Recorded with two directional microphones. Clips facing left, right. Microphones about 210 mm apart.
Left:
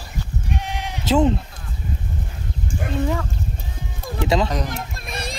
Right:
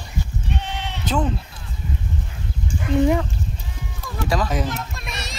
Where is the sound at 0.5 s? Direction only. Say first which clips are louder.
Left 1 dB; 10° left (ahead or behind).